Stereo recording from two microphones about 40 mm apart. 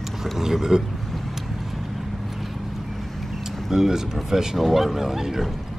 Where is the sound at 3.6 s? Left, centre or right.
Centre.